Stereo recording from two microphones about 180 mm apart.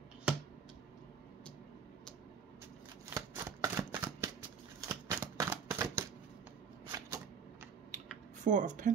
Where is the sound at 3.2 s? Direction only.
15° right (ahead or behind).